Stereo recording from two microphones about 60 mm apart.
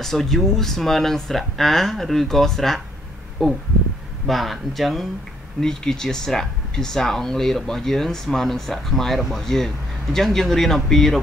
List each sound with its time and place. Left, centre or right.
0.0 s speech: centre